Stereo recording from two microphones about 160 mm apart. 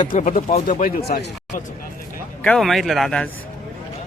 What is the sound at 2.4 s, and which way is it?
Speech, 5° left (ahead or behind).